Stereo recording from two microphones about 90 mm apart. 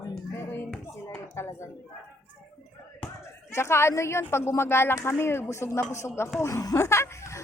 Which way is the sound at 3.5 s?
30° left (ahead or behind).